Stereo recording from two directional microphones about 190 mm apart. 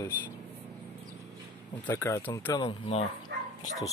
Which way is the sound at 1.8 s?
15° left (ahead or behind).